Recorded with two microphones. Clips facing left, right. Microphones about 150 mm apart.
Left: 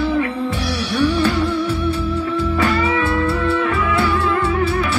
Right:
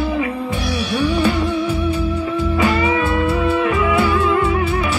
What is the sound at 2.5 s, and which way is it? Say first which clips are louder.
Music: right 2 dB; 15° right (ahead or behind).